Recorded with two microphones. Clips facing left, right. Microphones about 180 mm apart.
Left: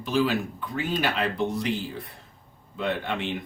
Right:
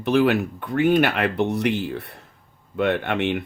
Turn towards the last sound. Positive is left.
turn(degrees=-65)  # may be behind; listen again after turning